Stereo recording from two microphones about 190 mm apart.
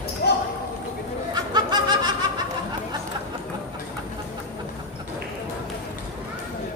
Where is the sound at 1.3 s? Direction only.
20° right (ahead or behind).